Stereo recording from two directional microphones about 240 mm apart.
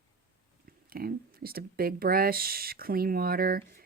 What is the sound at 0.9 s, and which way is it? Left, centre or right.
Speech, right.